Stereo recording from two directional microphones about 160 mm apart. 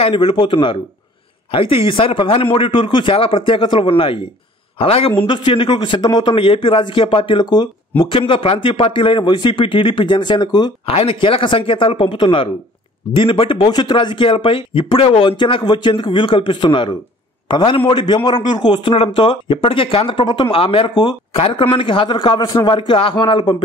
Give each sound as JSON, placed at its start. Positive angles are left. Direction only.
{"t": 0.0, "sound": "speech", "side_deg": 35}